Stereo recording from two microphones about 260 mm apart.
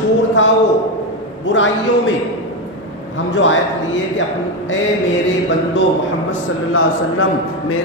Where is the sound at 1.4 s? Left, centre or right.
Left.